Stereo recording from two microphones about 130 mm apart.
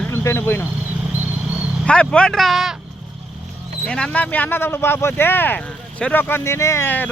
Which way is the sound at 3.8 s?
5° left (ahead or behind).